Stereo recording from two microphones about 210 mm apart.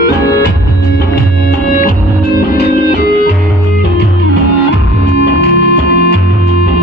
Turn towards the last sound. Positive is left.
turn(degrees=55)  # may be behind; listen again after turning